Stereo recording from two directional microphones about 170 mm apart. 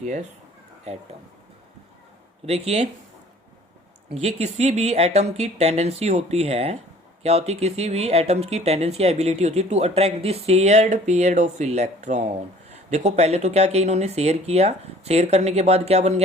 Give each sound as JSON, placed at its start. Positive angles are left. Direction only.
{"t": 0.0, "sound": "speech", "side_deg": -45}
{"t": 2.5, "sound": "speech", "side_deg": -40}
{"t": 4.1, "sound": "speech", "side_deg": -35}